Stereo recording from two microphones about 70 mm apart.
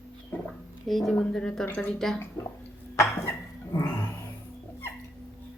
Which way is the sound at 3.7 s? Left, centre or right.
Left.